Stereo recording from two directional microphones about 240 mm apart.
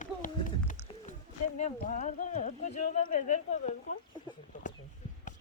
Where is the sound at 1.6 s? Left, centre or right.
Left.